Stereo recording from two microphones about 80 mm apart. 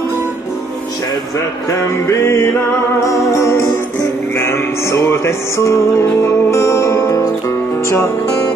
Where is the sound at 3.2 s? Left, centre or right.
Left.